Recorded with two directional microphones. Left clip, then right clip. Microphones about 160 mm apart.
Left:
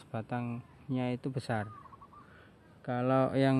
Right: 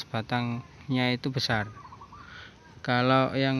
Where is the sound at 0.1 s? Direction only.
Centre (ahead or behind).